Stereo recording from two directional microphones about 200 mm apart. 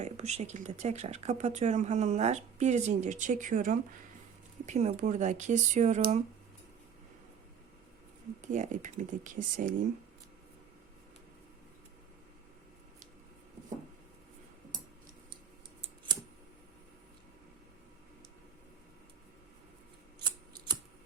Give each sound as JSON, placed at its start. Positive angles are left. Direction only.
{"t": 0.0, "sound": "speech", "side_deg": -35}
{"t": 8.4, "sound": "speech", "side_deg": -40}
{"t": 20.2, "sound": "typing", "side_deg": -20}